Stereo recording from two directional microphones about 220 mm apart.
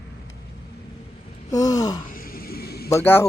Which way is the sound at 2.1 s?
40° left (ahead or behind).